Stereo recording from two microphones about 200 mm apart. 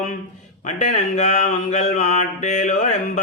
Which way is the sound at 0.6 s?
35° left (ahead or behind).